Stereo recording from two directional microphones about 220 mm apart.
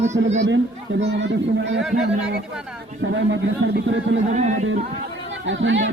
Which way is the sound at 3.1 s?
55° right (ahead or behind).